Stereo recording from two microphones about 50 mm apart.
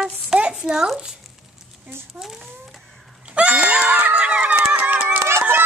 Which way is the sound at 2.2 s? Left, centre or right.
Centre.